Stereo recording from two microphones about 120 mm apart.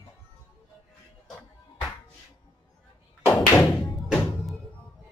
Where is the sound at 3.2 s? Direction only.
20° left (ahead or behind).